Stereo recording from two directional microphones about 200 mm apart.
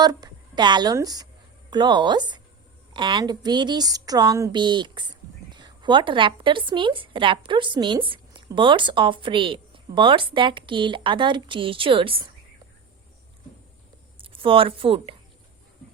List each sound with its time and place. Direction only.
0.0 s speech: 20° right (ahead or behind)
14.2 s speech: 25° right (ahead or behind)